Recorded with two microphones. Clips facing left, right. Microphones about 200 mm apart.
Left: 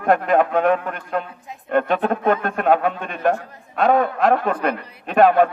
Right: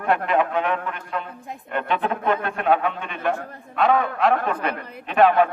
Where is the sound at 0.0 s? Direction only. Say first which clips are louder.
Left 4 dB; 45° left (ahead or behind).